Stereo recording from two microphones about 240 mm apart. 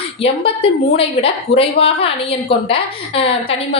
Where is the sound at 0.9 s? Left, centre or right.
Left.